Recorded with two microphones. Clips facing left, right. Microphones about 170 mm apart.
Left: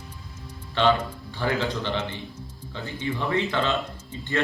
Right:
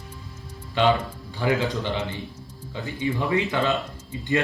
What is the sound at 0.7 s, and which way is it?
A man's voice, 10° right (ahead or behind).